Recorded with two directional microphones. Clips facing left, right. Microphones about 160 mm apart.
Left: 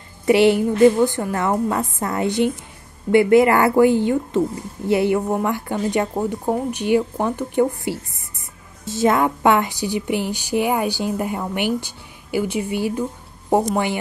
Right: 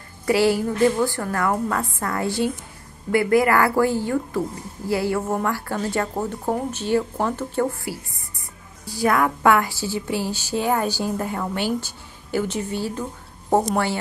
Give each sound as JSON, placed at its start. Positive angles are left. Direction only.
{"t": 0.2, "sound": "a woman's voice", "side_deg": 20}